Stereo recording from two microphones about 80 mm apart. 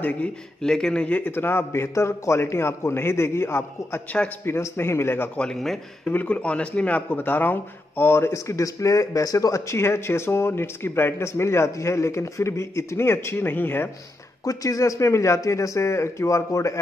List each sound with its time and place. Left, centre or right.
0.0 s speech: centre
0.6 s speech: centre; by 5.3 s left
5.4 s speech: centre
6.0 s speech: centre
14.4 s speech: left